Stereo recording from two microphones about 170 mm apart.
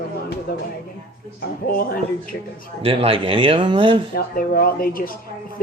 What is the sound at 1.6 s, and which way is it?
Speech, 60° left (ahead or behind).